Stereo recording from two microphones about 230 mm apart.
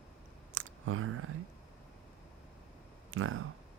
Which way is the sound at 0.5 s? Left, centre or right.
Right.